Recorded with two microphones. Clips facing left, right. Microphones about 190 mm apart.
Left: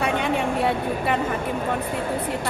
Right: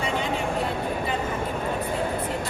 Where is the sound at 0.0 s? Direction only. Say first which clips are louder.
Left 4 dB; 65° left (ahead or behind).